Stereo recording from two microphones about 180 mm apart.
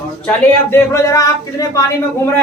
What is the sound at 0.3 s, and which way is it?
Speech, 15° left (ahead or behind).